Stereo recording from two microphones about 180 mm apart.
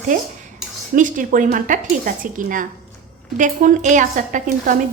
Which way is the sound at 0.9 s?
45° right (ahead or behind).